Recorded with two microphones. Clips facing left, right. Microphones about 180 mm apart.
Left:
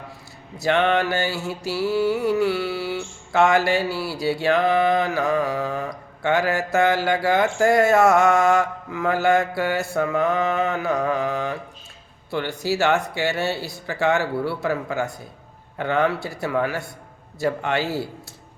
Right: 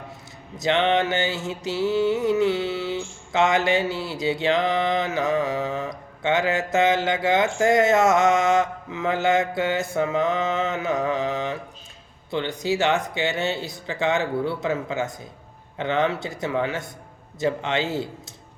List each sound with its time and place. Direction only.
0.5 s mantra: 20° right (ahead or behind)